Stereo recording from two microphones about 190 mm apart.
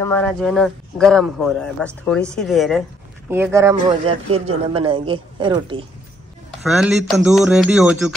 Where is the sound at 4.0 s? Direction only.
30° right (ahead or behind).